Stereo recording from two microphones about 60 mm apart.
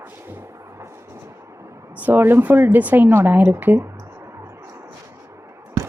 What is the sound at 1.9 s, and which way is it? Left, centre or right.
Speech, right.